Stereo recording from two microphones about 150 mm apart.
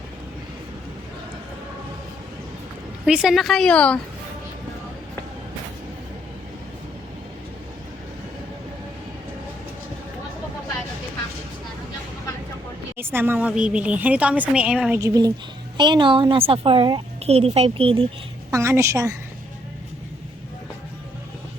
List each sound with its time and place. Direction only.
3.1 s a woman's voice: 5° right (ahead or behind)
13.0 s speech: 15° right (ahead or behind)
14.9 s a woman's voice: 20° right (ahead or behind); by 18.0 s 40° right (ahead or behind)
18.5 s a woman's voice: 20° right (ahead or behind)